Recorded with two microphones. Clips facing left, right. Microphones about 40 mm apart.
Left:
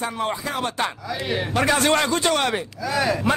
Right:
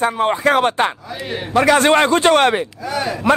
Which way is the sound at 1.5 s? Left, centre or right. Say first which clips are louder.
Right 8 dB; right.